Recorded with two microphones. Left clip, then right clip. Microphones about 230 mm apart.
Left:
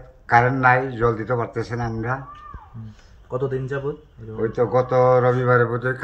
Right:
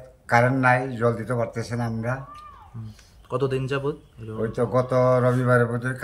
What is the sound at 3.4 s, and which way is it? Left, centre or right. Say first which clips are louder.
Speech: even; right.